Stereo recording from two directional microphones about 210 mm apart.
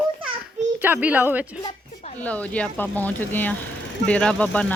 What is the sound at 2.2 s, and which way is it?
Speech, 5° left (ahead or behind).